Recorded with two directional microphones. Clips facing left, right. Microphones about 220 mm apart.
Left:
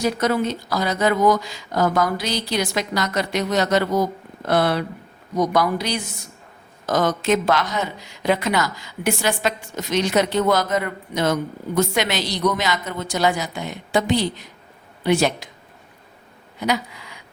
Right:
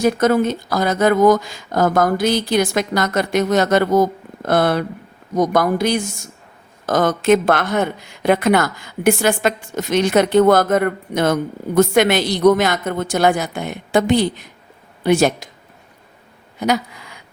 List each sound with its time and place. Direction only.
0.0 s speech: 50° right (ahead or behind)
16.6 s speech: 45° right (ahead or behind)